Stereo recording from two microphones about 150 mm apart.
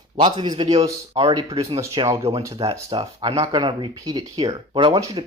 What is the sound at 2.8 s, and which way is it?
Speech, 35° right (ahead or behind).